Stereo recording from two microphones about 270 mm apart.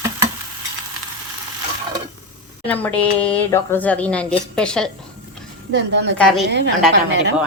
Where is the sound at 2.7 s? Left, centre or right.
Centre.